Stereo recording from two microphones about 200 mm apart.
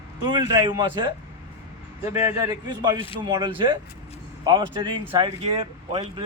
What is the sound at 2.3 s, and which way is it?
A man's voice, 20° right (ahead or behind).